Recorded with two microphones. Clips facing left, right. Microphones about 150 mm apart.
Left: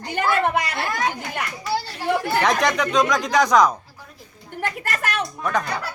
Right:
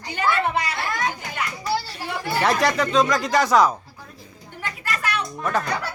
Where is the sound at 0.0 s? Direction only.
50° left (ahead or behind).